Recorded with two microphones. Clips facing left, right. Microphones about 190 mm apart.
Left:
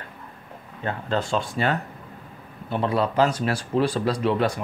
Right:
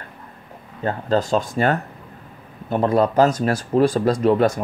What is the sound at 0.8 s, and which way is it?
A man's voice, 40° right (ahead or behind).